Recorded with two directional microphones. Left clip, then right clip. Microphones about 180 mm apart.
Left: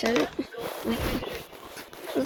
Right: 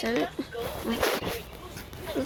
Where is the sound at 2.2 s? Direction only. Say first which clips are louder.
Left 3 dB; 25° left (ahead or behind).